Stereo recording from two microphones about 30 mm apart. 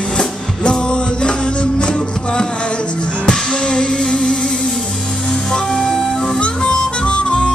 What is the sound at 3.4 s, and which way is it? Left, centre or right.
Music, left.